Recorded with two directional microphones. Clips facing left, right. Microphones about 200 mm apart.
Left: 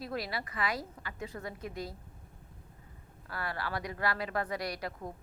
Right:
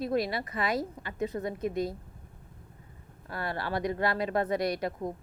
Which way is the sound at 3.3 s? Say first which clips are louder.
Right 4 dB; 25° right (ahead or behind).